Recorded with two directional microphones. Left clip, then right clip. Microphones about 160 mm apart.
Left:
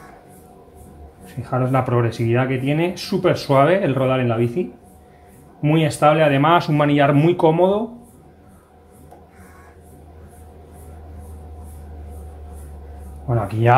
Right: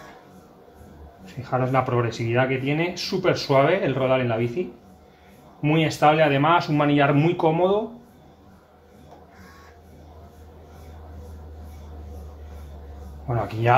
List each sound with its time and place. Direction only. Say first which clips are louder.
1.2 s speech: left 2 dB; 55° left (ahead or behind)
13.3 s a sound: left 3 dB; 50° left (ahead or behind)
13.7 s speech: left 4 dB; 50° left (ahead or behind)